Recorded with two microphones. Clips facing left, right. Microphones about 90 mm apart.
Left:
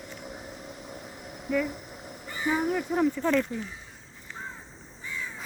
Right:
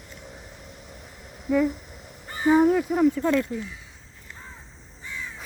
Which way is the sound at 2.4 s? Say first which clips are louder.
Right 9 dB; 35° right (ahead or behind).